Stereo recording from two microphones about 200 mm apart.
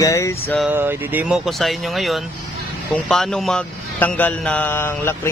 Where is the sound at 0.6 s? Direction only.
10° right (ahead or behind).